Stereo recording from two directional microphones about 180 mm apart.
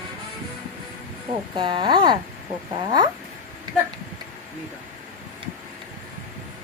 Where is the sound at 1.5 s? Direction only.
25° right (ahead or behind).